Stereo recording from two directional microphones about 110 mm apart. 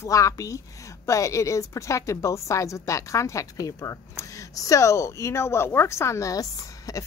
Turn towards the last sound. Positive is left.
turn(degrees=30)  # may be behind; listen again after turning